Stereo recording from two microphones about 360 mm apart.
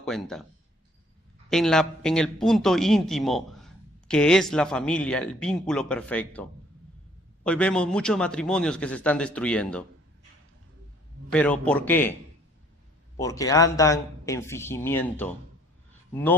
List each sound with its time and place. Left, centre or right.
0.0 s speech: centre
1.5 s a man's voice: centre
11.3 s a man's voice: centre
13.1 s a man's voice: centre